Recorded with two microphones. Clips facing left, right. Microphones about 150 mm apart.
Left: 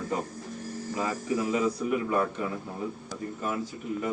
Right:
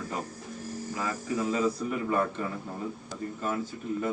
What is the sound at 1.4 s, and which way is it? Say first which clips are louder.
Speech: right 1 dB; 10° left (ahead or behind).